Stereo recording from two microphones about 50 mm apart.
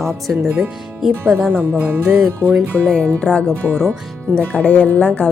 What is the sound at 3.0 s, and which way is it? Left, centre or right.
Speech, left.